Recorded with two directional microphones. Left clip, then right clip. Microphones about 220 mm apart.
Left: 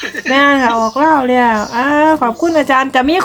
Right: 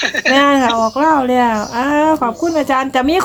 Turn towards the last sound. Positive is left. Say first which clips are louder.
# left 3 dB
turn(degrees=0)  # may be behind; listen again after turning